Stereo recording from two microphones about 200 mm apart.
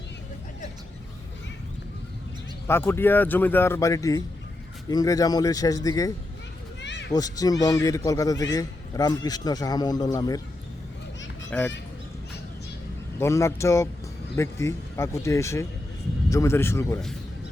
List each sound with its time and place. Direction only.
2.6 s speech: 10° left (ahead or behind)
6.8 s children playing: 60° left (ahead or behind)
7.1 s a man's voice: 20° left (ahead or behind)
11.5 s speech: 5° left (ahead or behind)
13.1 s speech: 15° left (ahead or behind)